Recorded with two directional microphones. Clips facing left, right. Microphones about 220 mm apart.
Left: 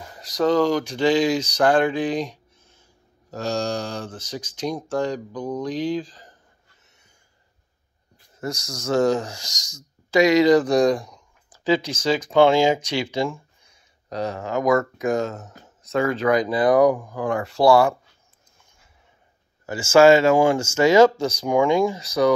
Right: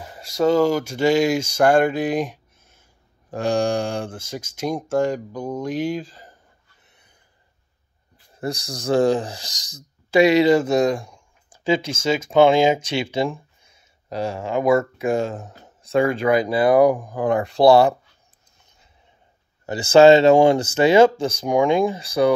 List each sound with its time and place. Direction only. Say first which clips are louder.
0.4 s speech: right 2 dB; 10° right (ahead or behind)
3.3 s speech: right 5 dB; 15° right (ahead or behind)
4.2 s speech: right 1 dB; 45° right (ahead or behind)
5.0 s speech: right 2 dB; 10° right (ahead or behind)
8.4 s speech: right 2 dB; 35° right (ahead or behind)
15.8 s speech: right 2 dB; 15° right (ahead or behind)
17.6 s speech: right 2 dB; 35° right (ahead or behind)
20.0 s speech: right 3 dB; 20° right (ahead or behind)
21.5 s speech: right 1 dB; 15° right (ahead or behind)
22.0 s speech: right 1 dB; 30° right (ahead or behind)